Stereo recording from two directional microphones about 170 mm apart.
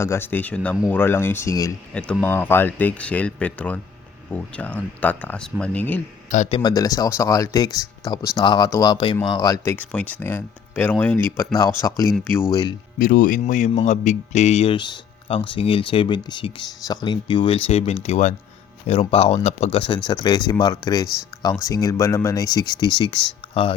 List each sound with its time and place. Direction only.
0.0 s speech: 15° left (ahead or behind)
1.9 s speech: 5° left (ahead or behind)
6.3 s speech: 45° left (ahead or behind)
6.6 s speech: 25° left (ahead or behind)
9.7 s speech: 10° left (ahead or behind)
12.1 s speech: centre (ahead or behind)
13.0 s speech: 55° left (ahead or behind); by 23.7 s 30° left (ahead or behind)